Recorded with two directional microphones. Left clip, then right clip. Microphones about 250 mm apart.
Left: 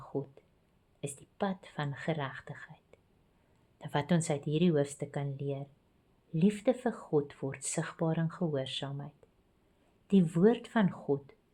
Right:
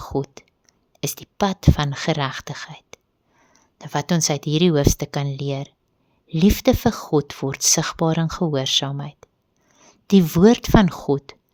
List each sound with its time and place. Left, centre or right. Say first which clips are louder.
0.0 s speech: right 13 dB; right
3.8 s speech: right 10 dB; right